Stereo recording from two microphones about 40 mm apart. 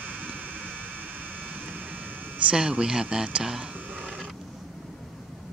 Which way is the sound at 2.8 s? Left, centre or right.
Centre.